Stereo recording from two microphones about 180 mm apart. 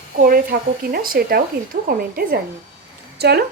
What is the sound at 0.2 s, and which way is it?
Speech, 50° right (ahead or behind).